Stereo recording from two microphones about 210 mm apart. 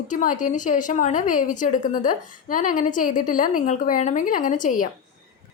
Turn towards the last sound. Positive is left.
turn(degrees=40)  # may be behind; listen again after turning